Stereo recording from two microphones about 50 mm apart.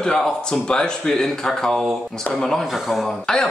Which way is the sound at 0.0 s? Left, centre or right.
Centre.